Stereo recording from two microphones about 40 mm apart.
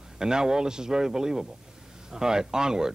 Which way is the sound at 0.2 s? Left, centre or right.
Centre.